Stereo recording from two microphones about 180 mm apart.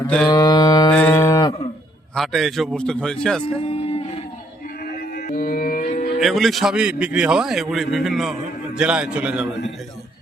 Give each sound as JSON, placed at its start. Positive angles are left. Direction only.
{"t": 0.3, "sound": "mantra", "side_deg": 25}
{"t": 0.9, "sound": "livestock", "side_deg": 10}
{"t": 1.2, "sound": "cattle", "side_deg": 25}
{"t": 2.1, "sound": "a man's voice", "side_deg": 0}
{"t": 3.7, "sound": "a sound", "side_deg": 35}
{"t": 4.9, "sound": "mantra", "side_deg": 55}
{"t": 6.1, "sound": "a man's voice", "side_deg": 0}